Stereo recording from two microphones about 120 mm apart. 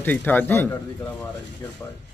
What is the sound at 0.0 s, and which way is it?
Speech, 15° left (ahead or behind).